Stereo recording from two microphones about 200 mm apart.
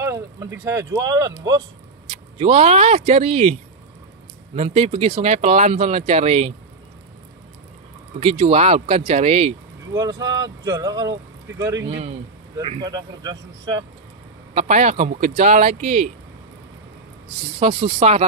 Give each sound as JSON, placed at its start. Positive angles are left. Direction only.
{"t": 0.0, "sound": "speech", "side_deg": -15}
{"t": 2.0, "sound": "speech", "side_deg": -30}
{"t": 4.6, "sound": "speech", "side_deg": -30}
{"t": 8.2, "sound": "speech", "side_deg": -30}
{"t": 9.9, "sound": "speech", "side_deg": -20}
{"t": 14.5, "sound": "speech", "side_deg": -35}
{"t": 17.6, "sound": "speech", "side_deg": -30}